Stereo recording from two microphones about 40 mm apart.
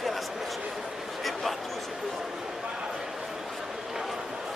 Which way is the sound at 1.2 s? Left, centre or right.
Centre.